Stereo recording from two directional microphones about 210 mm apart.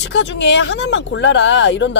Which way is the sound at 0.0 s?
55° left (ahead or behind).